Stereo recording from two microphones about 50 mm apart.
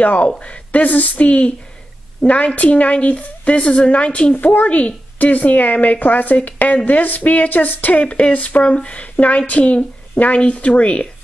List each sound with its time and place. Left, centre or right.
0.0 s a woman's voice: left